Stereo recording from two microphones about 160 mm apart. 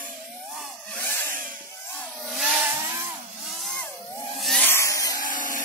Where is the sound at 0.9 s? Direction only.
10° left (ahead or behind).